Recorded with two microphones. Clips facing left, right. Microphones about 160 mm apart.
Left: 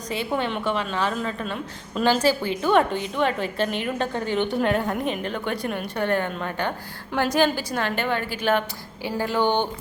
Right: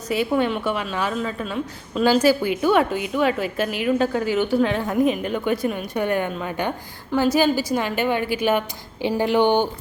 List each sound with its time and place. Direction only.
0.1 s a woman's voice: 10° right (ahead or behind)
9.0 s speech: 20° right (ahead or behind)